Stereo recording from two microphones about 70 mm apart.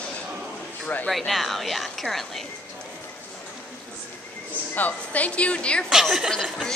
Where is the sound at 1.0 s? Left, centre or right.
Centre.